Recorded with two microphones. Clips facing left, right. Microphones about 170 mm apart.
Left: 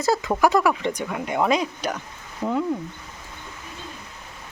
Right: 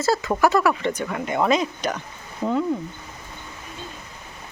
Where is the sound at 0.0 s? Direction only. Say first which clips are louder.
Even; 15° left (ahead or behind).